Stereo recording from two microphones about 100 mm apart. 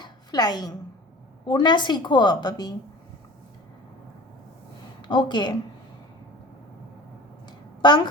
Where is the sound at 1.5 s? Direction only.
50° left (ahead or behind).